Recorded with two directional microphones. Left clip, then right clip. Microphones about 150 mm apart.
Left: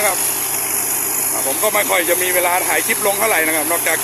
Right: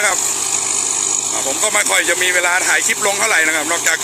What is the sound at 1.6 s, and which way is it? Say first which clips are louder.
Speech: even; 10° left (ahead or behind).